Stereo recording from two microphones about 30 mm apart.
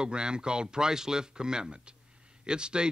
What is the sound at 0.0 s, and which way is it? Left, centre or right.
Speech, right.